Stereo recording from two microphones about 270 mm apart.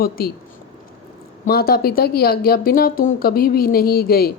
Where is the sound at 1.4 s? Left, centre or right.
Left.